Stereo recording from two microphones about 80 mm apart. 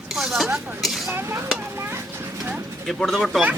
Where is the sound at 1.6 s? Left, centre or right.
Right.